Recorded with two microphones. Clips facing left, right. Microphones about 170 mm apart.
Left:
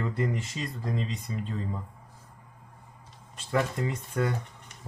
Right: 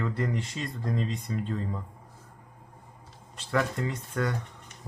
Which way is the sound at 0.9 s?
45° right (ahead or behind).